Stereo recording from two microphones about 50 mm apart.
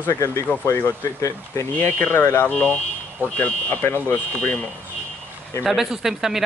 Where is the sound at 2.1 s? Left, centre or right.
Left.